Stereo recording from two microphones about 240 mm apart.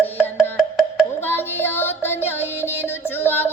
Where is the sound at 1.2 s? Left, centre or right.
Centre.